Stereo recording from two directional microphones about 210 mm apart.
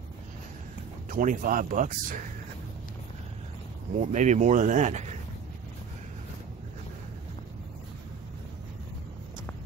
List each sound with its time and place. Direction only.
1.1 s speech: 40° right (ahead or behind)
4.1 s speech: 35° right (ahead or behind)